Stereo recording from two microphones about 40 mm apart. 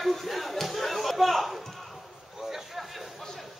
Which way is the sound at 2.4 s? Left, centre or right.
Centre.